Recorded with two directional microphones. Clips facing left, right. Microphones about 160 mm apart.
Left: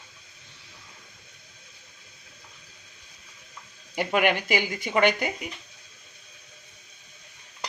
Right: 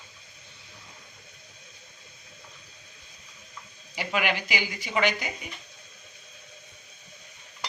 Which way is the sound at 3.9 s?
50° left (ahead or behind).